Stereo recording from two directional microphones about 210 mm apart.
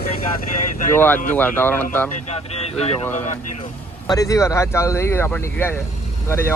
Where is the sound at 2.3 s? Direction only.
30° left (ahead or behind).